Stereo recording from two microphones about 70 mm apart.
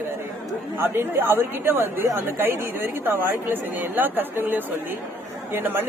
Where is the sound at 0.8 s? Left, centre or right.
Right.